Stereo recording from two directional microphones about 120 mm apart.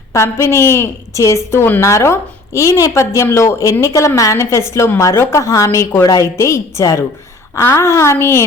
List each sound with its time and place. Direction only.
0.1 s a woman's voice: 25° left (ahead or behind)